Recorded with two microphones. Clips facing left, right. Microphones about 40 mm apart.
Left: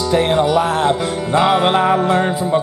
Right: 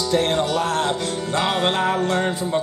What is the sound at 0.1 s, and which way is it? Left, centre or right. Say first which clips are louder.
Music: left 6 dB; centre.